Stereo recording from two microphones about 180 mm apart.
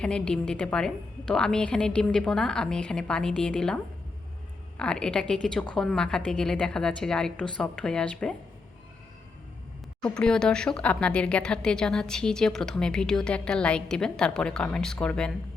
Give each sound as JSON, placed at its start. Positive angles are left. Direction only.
{"t": 0.0, "sound": "speech", "side_deg": 5}
{"t": 4.8, "sound": "speech", "side_deg": 5}
{"t": 10.0, "sound": "speech", "side_deg": 5}